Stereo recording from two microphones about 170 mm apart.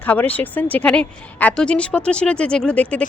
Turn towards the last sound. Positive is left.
turn(degrees=5)  # may be behind; listen again after turning